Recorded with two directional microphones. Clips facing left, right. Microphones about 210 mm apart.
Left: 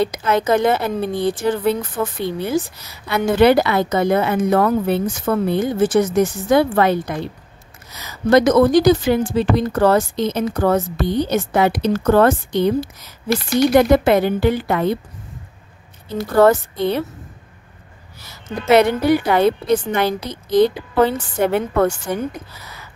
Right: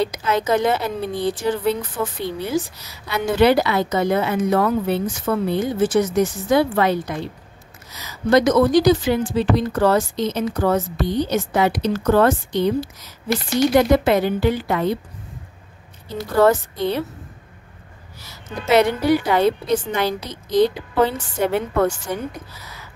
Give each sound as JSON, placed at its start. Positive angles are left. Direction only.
{"t": 0.0, "sound": "a woman's voice", "side_deg": 55}
{"t": 16.2, "sound": "a woman's voice", "side_deg": 55}
{"t": 18.7, "sound": "a woman's voice", "side_deg": 55}